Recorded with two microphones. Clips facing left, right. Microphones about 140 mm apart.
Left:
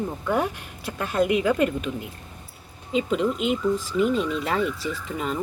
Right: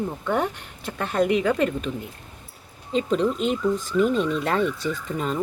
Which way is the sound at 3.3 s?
35° right (ahead or behind).